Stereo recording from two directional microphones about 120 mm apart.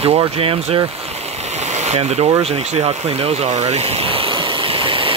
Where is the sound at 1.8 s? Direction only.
65° right (ahead or behind); by 5.1 s 50° right (ahead or behind).